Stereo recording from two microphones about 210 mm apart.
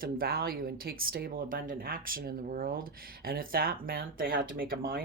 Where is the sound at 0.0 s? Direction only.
45° right (ahead or behind).